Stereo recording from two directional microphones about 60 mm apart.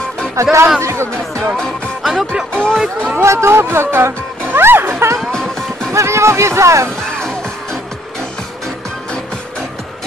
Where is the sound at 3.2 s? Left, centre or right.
Right.